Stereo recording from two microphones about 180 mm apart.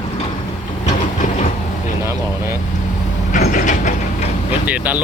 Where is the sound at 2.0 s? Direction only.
15° right (ahead or behind).